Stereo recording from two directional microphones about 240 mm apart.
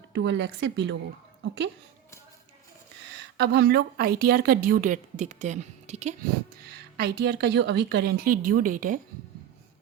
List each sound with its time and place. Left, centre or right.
0.1 s speech: right
3.3 s a woman's voice: right
6.9 s a woman's voice: right